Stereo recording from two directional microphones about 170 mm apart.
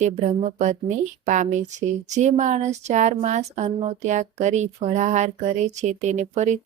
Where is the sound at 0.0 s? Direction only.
45° right (ahead or behind).